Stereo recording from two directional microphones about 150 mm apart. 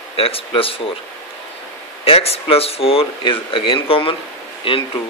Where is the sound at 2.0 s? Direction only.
40° left (ahead or behind).